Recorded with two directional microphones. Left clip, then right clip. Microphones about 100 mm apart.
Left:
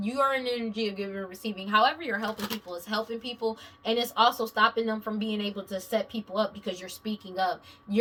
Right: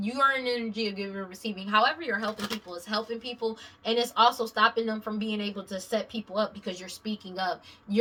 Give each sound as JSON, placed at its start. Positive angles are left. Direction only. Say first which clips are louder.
{"t": 0.0, "sound": "a woman's voice", "louder": "right 1 dB", "side_deg": -30}